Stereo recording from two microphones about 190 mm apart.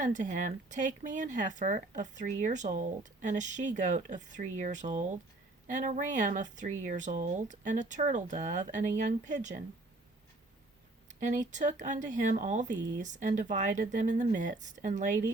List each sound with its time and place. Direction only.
0.0 s speech: 40° right (ahead or behind)
11.1 s speech: 40° right (ahead or behind)